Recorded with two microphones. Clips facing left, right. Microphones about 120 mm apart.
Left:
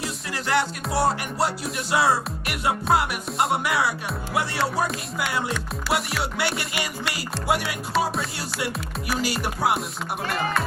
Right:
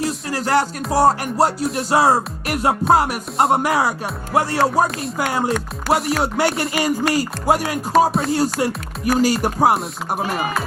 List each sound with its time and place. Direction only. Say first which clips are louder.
0.0 s music: right 8 dB; 40° right (ahead or behind)
10.2 s speech: right 1 dB; 15° right (ahead or behind)